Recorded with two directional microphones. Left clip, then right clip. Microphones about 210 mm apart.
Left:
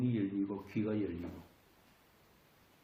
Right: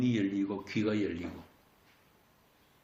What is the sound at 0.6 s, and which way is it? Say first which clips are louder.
Speech: right 5 dB; 40° right (ahead or behind).